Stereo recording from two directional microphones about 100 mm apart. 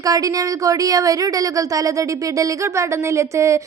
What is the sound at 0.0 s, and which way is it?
Speech, 35° right (ahead or behind).